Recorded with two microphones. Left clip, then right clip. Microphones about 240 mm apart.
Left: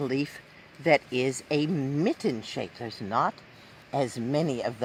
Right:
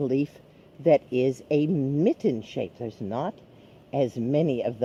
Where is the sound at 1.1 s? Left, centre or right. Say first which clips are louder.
Right 3 dB; left.